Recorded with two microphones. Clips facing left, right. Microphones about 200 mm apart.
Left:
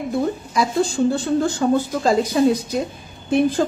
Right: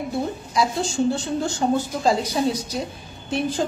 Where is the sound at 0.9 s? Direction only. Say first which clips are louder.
Left 2 dB; 55° left (ahead or behind).